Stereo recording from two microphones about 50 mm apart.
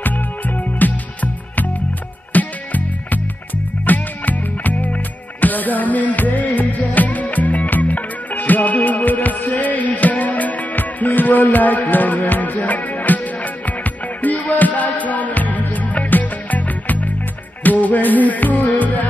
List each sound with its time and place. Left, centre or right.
0.7 s music: left